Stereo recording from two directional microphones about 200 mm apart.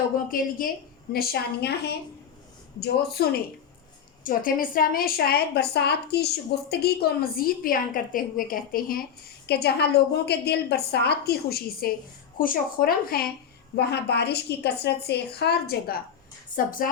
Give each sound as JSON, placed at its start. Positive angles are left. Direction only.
{"t": 0.3, "sound": "a woman's voice", "side_deg": 45}